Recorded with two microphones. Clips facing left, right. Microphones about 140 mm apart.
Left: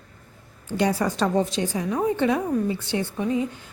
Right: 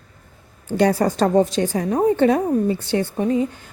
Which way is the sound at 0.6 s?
45° right (ahead or behind).